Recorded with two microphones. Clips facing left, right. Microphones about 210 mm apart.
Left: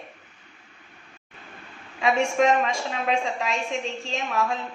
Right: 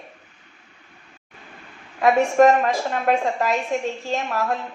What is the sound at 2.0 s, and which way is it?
A woman's voice, 55° right (ahead or behind).